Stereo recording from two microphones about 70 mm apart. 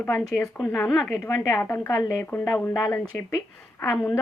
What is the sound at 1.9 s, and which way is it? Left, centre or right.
Speech, left.